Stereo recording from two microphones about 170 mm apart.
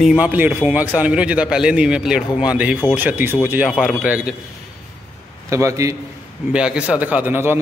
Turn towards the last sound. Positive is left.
turn(degrees=-10)  # may be behind; listen again after turning